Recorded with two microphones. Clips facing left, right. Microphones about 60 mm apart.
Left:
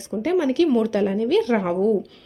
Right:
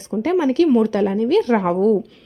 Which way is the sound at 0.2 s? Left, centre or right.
Right.